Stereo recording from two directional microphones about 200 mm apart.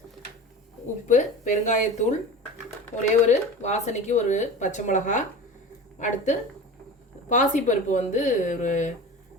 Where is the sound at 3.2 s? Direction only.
35° left (ahead or behind).